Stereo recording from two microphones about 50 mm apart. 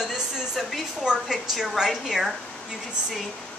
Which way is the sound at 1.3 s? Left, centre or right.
Centre.